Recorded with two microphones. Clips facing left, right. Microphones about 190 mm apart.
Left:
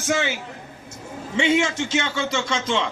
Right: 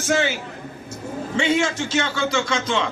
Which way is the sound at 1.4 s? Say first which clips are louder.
Left 1 dB; 20° left (ahead or behind).